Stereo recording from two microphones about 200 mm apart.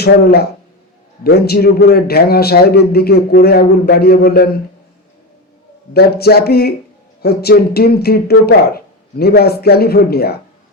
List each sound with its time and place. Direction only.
0.0 s a man's voice: 50° left (ahead or behind)
5.9 s a man's voice: 50° left (ahead or behind)